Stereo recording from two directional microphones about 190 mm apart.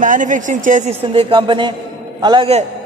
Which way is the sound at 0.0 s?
45° right (ahead or behind).